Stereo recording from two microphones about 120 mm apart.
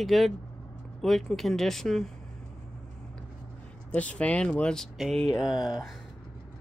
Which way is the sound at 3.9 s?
10° left (ahead or behind).